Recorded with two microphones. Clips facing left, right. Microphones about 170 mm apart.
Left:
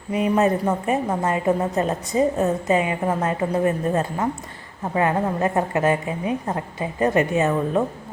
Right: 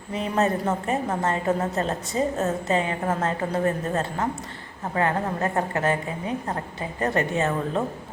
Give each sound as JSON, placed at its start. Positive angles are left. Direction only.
{"t": 0.1, "sound": "a woman's voice", "side_deg": 15}